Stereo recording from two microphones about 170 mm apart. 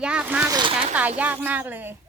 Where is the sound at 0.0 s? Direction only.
5° right (ahead or behind).